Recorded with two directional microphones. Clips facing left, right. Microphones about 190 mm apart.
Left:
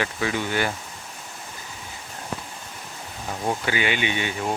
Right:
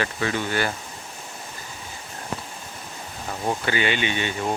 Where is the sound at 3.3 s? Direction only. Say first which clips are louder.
Even; 5° left (ahead or behind).